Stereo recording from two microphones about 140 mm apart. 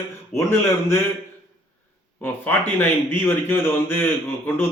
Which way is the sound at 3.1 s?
15° left (ahead or behind).